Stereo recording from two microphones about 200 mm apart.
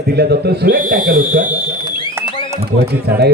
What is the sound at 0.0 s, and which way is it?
A man's voice, 55° right (ahead or behind).